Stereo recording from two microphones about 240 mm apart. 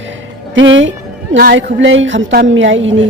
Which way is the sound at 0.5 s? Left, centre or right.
Right.